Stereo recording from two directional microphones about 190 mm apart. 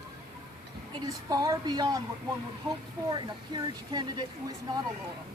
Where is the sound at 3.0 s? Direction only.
20° right (ahead or behind).